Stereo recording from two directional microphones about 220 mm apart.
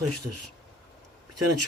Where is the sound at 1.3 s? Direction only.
90° right.